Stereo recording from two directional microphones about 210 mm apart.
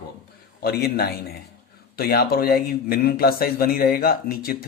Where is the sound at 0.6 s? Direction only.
50° left (ahead or behind).